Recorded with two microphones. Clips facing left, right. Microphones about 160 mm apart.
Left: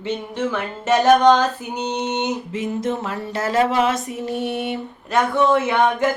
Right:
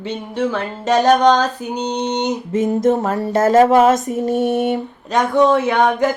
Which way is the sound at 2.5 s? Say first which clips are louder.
Right 11 dB; 45° right (ahead or behind).